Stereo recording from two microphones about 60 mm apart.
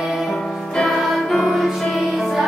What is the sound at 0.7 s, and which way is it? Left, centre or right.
Music, centre.